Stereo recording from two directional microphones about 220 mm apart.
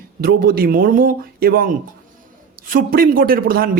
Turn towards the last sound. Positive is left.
turn(degrees=-40)  # may be behind; listen again after turning